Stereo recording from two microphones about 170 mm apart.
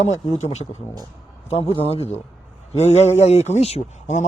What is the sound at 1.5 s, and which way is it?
Speech, 30° left (ahead or behind).